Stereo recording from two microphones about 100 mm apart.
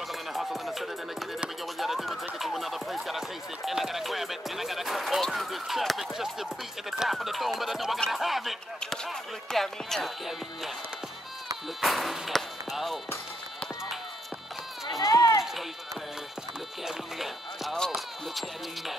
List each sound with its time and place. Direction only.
0.1 s speech: centre (ahead or behind)
11.8 s speech: centre (ahead or behind)
14.9 s run: 35° left (ahead or behind)
16.8 s speech: centre (ahead or behind)